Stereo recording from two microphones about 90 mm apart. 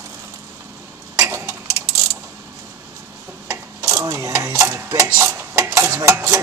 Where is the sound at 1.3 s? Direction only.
30° right (ahead or behind).